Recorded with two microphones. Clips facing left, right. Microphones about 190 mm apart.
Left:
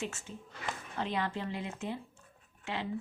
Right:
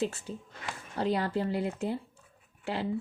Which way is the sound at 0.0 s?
35° right (ahead or behind).